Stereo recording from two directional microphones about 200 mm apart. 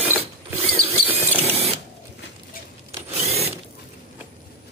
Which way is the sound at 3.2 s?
30° right (ahead or behind).